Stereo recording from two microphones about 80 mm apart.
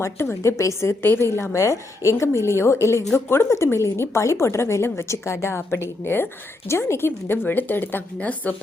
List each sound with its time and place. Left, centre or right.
0.0 s a woman's voice: left; by 8.5 s centre